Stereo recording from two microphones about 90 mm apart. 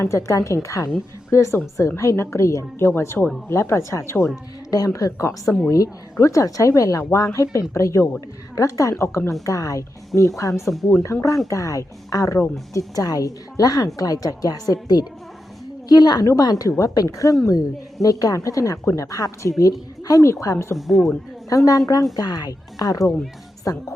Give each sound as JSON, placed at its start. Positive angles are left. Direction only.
{"t": 0.0, "sound": "a woman's voice", "side_deg": 35}
{"t": 10.5, "sound": "speech", "side_deg": 0}
{"t": 11.1, "sound": "a woman's voice", "side_deg": 35}
{"t": 20.7, "sound": "speech", "side_deg": 0}
{"t": 21.5, "sound": "a woman's voice", "side_deg": 40}